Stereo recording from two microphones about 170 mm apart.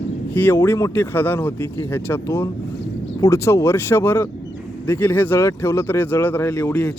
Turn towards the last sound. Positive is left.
turn(degrees=15)  # may be behind; listen again after turning